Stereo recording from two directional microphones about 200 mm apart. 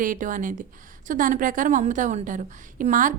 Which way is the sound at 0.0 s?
40° right (ahead or behind).